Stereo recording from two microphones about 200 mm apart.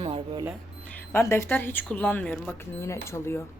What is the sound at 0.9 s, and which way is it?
Speech, 10° left (ahead or behind).